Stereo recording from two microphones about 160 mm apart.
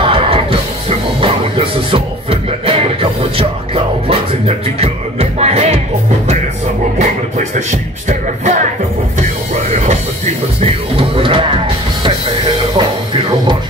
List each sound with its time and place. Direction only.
0.0 s music: 35° right (ahead or behind)
7.0 s music: 50° right (ahead or behind)
10.6 s music: 35° right (ahead or behind)